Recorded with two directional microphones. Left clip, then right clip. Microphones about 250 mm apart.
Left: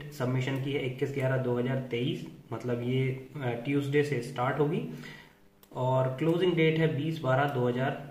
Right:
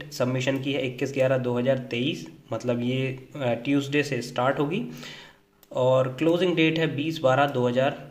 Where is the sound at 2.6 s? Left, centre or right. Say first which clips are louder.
Right 4 dB; right.